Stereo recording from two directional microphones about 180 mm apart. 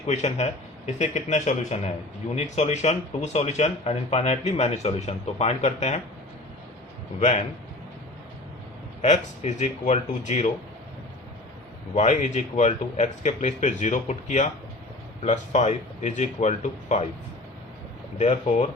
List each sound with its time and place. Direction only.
0.1 s speech: 40° left (ahead or behind)
7.2 s speech: 40° left (ahead or behind)
9.0 s speech: 40° left (ahead or behind)
11.9 s speech: 40° left (ahead or behind)
18.2 s speech: 40° left (ahead or behind)